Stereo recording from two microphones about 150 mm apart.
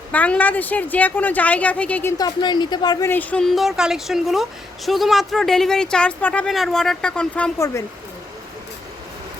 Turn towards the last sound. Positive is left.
turn(degrees=20)  # may be behind; listen again after turning